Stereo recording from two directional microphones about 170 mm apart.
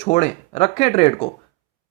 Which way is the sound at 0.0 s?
40° left (ahead or behind).